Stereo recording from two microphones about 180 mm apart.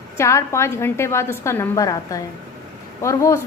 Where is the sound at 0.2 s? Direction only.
15° left (ahead or behind).